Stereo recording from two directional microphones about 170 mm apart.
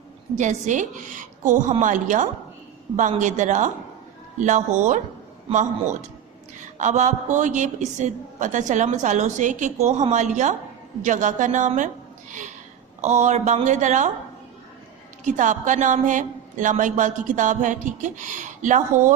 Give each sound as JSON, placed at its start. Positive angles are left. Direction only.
{"t": 0.3, "sound": "a woman's voice", "side_deg": -45}
{"t": 6.6, "sound": "a woman's voice", "side_deg": -45}
{"t": 13.0, "sound": "a woman's voice", "side_deg": -40}
{"t": 15.2, "sound": "a woman's voice", "side_deg": -45}